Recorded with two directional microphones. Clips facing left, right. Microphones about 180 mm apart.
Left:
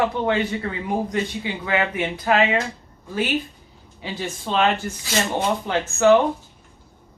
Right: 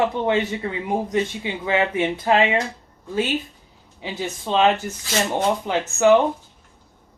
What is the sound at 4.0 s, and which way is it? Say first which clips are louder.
A man's voice: right 1 dB; 20° right (ahead or behind).